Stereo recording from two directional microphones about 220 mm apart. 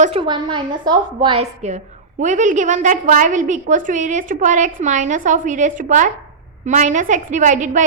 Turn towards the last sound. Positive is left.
turn(degrees=-35)  # may be behind; listen again after turning